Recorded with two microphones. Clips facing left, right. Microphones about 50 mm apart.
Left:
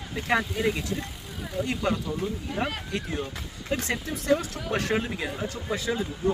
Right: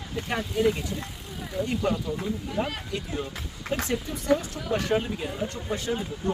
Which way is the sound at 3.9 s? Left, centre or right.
Left.